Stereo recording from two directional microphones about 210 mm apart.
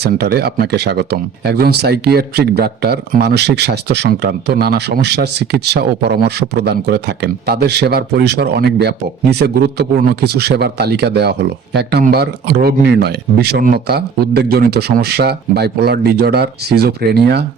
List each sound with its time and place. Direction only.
0.0 s speech: 50° right (ahead or behind)